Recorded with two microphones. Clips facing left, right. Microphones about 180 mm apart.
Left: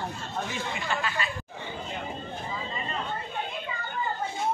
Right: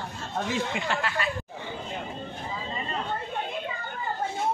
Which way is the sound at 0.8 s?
65° right (ahead or behind).